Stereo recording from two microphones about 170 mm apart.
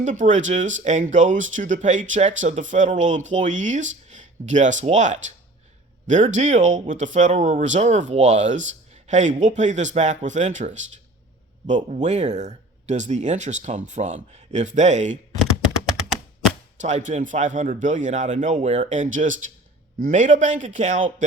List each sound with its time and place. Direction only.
0.0 s speech: 45° right (ahead or behind)
12.0 s speech: 40° right (ahead or behind)
16.8 s speech: 45° right (ahead or behind)